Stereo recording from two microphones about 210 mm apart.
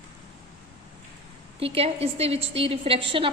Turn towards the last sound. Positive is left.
turn(degrees=-25)  # may be behind; listen again after turning